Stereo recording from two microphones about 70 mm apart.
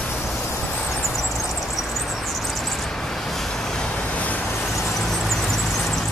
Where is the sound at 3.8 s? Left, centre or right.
Centre.